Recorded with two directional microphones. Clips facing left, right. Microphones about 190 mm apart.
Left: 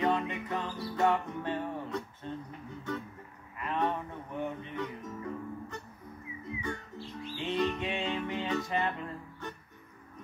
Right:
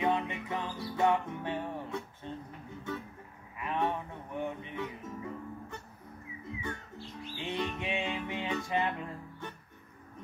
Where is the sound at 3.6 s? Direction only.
10° right (ahead or behind).